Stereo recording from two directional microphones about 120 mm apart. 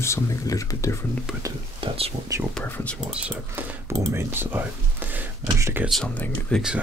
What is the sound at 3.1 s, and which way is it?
Speech, 10° right (ahead or behind).